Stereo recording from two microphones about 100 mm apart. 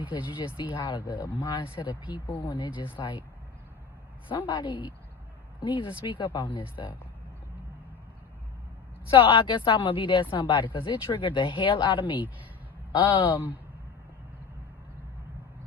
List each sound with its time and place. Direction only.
0.1 s speech: 55° left (ahead or behind)
2.1 s speech: 15° right (ahead or behind)
2.5 s speech: 55° left (ahead or behind)
4.3 s speech: 55° left (ahead or behind)
9.0 s speech: 55° left (ahead or behind)
12.9 s speech: 45° left (ahead or behind)